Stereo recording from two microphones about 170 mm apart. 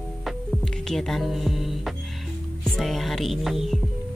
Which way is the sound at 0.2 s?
Centre (ahead or behind).